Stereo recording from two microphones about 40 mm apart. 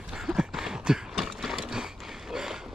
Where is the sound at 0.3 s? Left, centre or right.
Centre.